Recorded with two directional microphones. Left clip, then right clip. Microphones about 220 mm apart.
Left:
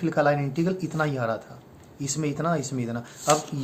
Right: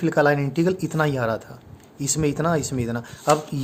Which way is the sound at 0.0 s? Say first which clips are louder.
Right 4 dB; 50° right (ahead or behind).